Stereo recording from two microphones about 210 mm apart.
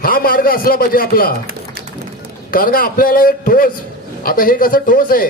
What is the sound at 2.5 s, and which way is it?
A man's voice, 40° left (ahead or behind).